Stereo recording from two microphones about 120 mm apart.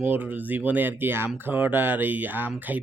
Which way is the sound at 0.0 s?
15° right (ahead or behind).